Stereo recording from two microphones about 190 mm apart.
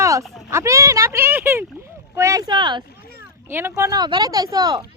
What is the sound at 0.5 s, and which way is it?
Speech, 15° right (ahead or behind).